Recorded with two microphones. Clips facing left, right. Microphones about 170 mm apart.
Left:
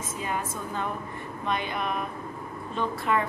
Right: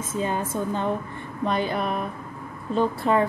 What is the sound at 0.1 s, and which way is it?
A woman's voice, 30° right (ahead or behind).